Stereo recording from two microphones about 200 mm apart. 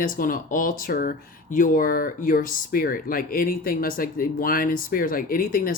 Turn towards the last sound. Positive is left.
turn(degrees=45)  # may be behind; listen again after turning